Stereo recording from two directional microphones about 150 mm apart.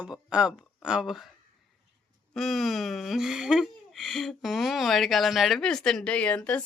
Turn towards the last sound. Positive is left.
turn(degrees=5)  # may be behind; listen again after turning